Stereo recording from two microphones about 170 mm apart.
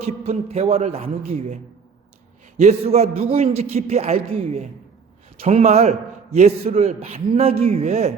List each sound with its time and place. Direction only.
0.0 s a man's voice: 35° right (ahead or behind)
2.6 s a man's voice: 40° right (ahead or behind)